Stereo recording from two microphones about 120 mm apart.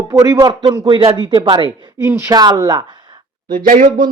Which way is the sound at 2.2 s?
30° right (ahead or behind).